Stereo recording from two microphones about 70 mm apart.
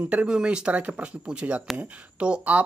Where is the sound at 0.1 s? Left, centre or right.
Centre.